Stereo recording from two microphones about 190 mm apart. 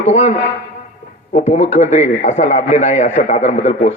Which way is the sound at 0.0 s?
35° left (ahead or behind).